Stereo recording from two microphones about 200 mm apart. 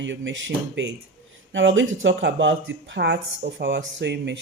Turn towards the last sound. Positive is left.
turn(degrees=-60)  # may be behind; listen again after turning